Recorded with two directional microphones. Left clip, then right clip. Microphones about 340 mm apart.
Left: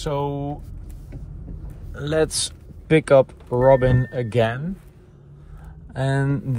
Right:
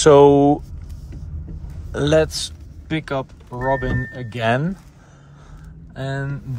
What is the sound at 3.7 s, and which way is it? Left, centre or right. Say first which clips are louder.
Speech: left 5 dB; centre.